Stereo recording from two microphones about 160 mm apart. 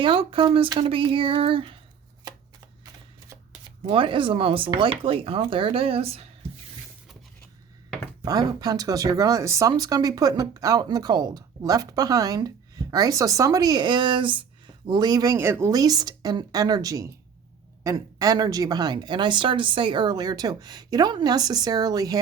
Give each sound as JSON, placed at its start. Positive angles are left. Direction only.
{"t": 0.0, "sound": "speech", "side_deg": -35}
{"t": 3.8, "sound": "speech", "side_deg": -30}
{"t": 8.2, "sound": "speech", "side_deg": -25}